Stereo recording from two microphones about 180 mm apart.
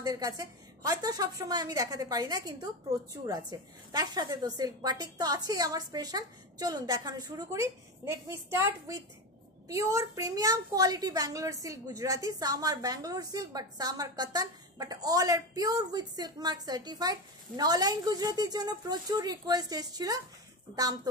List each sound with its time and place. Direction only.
0.0 s a woman's voice: 20° right (ahead or behind)